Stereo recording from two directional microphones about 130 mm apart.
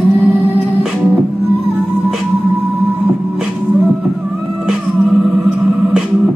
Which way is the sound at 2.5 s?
15° right (ahead or behind).